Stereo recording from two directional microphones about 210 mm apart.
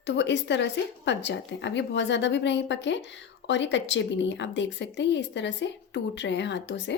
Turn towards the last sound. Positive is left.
turn(degrees=55)  # may be behind; listen again after turning